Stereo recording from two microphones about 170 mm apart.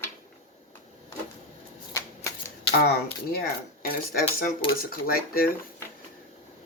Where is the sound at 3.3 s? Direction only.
65° left (ahead or behind).